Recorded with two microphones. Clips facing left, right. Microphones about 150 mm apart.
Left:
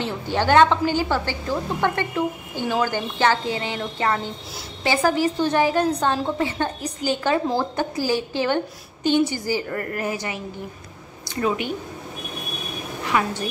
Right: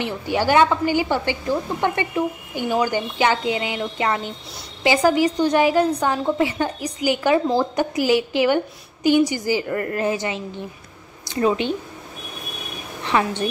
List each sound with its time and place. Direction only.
0.3 s a woman's voice: 10° right (ahead or behind)